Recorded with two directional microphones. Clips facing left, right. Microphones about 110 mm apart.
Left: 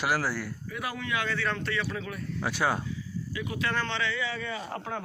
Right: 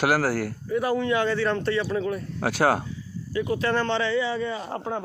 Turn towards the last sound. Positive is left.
turn(degrees=-30)  # may be behind; listen again after turning